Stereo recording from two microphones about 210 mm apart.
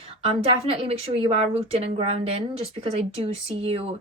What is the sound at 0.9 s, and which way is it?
A woman's voice, 25° right (ahead or behind).